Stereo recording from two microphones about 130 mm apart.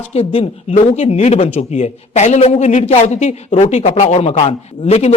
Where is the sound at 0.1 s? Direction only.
50° left (ahead or behind).